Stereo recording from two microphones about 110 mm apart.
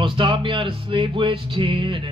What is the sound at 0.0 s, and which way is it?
Music, 50° right (ahead or behind).